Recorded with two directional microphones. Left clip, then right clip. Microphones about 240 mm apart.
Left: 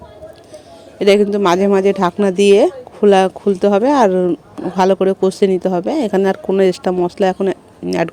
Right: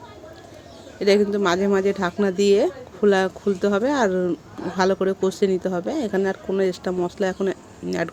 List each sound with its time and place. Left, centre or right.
0.9 s speech: left